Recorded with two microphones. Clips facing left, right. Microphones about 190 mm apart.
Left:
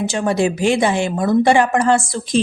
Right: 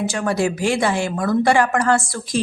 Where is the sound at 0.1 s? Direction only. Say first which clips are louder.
Left 3 dB; 25° left (ahead or behind).